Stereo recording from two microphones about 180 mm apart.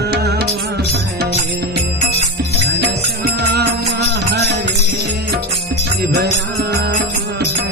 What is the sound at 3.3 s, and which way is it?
Music, 65° right (ahead or behind).